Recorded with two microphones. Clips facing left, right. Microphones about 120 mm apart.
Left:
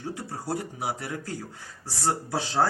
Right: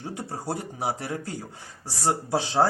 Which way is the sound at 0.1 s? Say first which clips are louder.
Even; 25° right (ahead or behind).